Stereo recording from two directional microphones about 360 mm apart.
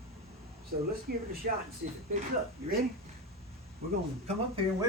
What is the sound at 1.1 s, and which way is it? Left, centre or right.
Speech, right.